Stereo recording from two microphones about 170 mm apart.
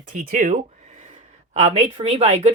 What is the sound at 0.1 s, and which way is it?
Speech, 50° right (ahead or behind).